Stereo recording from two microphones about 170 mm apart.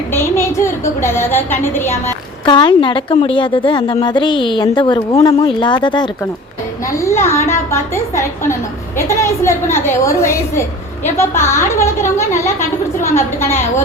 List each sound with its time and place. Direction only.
0.1 s a woman's voice: 15° left (ahead or behind)
2.4 s a woman's voice: 30° left (ahead or behind)